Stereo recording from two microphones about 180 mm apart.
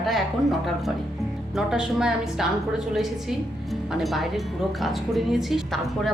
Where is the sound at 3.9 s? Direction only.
Centre (ahead or behind).